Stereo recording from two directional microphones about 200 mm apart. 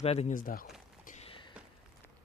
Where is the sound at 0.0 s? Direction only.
30° left (ahead or behind).